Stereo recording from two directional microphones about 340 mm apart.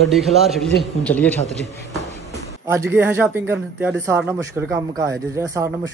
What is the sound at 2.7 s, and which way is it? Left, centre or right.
Speech, centre.